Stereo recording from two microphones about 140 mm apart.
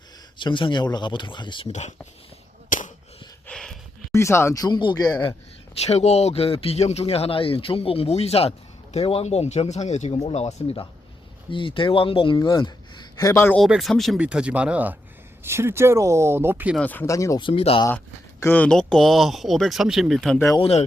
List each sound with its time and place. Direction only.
0.3 s a man's voice: 35° left (ahead or behind)
2.6 s a sound: 65° left (ahead or behind)
3.4 s a sound: 5° left (ahead or behind)
4.1 s speech: 20° left (ahead or behind)
5.8 s a man's voice: 50° left (ahead or behind); by 13.6 s 15° left (ahead or behind)
13.6 s speech: centre (ahead or behind)
16.7 s speech: 10° left (ahead or behind)
17.1 s speech: 25° left (ahead or behind)
17.4 s speech: 40° left (ahead or behind)
17.8 s speech: 20° left (ahead or behind); by 20.4 s centre (ahead or behind)
20.6 s speech: 50° left (ahead or behind)